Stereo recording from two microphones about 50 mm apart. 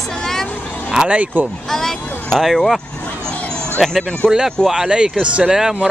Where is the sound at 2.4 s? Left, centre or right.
Centre.